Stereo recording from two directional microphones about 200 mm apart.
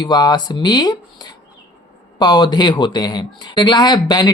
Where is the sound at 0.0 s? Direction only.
20° left (ahead or behind).